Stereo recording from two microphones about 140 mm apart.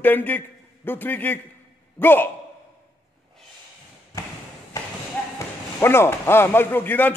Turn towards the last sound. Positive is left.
turn(degrees=15)  # may be behind; listen again after turning